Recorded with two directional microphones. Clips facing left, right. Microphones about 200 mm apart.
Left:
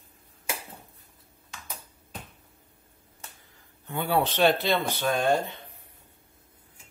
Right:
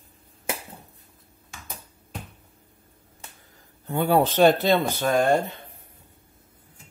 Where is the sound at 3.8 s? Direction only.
40° right (ahead or behind).